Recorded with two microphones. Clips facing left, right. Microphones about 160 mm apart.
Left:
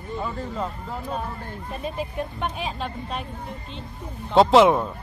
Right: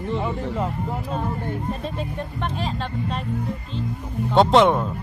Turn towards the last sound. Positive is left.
turn(degrees=0)  # may be behind; listen again after turning